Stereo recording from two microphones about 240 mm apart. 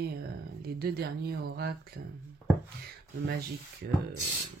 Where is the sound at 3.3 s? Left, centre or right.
Right.